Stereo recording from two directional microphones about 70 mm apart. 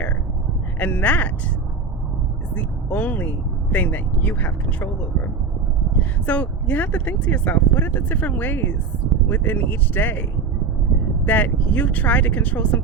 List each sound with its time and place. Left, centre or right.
0.8 s speech: left
2.6 s speech: left
6.0 s speech: left
11.3 s speech: left